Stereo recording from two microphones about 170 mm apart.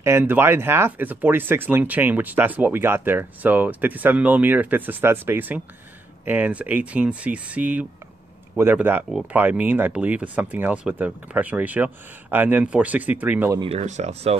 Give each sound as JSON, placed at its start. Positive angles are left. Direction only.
{"t": 0.0, "sound": "speech", "side_deg": -15}
{"t": 13.6, "sound": "speech", "side_deg": -35}